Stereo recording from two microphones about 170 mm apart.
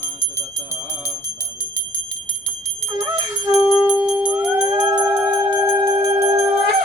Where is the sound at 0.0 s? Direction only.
15° left (ahead or behind).